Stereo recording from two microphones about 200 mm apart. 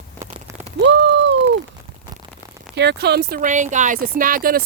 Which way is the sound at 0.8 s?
65° right (ahead or behind).